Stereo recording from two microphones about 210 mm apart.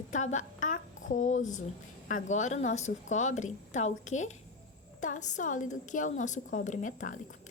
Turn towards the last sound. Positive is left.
turn(degrees=40)  # may be behind; listen again after turning